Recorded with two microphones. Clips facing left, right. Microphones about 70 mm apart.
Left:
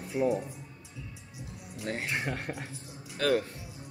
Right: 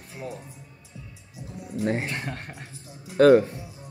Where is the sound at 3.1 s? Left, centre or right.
Right.